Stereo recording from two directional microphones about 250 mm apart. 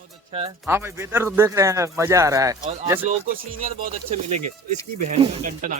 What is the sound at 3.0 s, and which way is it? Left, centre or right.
Speech, right.